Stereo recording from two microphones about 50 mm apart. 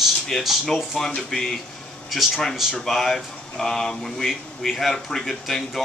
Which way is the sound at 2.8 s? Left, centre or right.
Centre.